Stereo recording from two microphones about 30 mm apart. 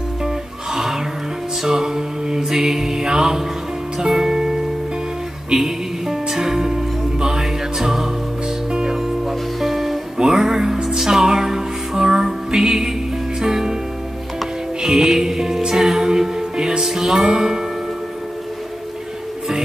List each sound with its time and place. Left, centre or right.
1.6 s mantra: centre
4.1 s music: centre
9.6 s music: centre
10.1 s music: right
14.8 s music: centre